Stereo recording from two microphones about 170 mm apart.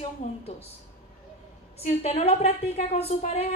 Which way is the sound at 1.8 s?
35° left (ahead or behind).